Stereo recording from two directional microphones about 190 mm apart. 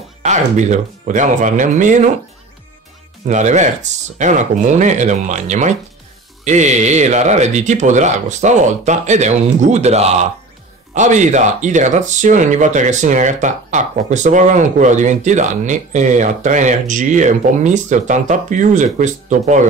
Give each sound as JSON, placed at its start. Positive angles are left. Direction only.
{"t": 0.2, "sound": "speech", "side_deg": -40}
{"t": 3.3, "sound": "speech", "side_deg": -40}